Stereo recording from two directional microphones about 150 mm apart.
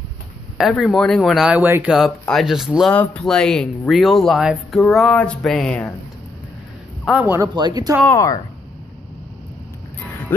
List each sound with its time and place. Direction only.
0.6 s speech: centre (ahead or behind)
2.0 s speech: centre (ahead or behind)
2.9 s speech: 10° left (ahead or behind)
7.1 s a man's voice: 10° right (ahead or behind)
7.5 s speech: 30° right (ahead or behind)
8.1 s speech: 20° left (ahead or behind)